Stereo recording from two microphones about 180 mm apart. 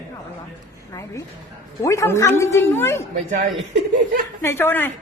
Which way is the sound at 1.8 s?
15° left (ahead or behind).